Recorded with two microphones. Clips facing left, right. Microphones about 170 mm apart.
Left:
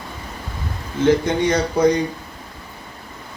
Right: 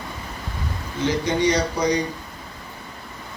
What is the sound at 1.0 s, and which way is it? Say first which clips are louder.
Speech: left 4 dB; 50° left (ahead or behind).